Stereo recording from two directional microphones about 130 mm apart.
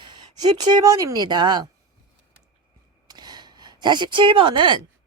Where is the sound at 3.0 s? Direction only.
35° right (ahead or behind).